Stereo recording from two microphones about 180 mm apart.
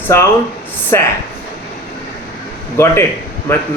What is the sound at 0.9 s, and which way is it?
Speech, 15° left (ahead or behind).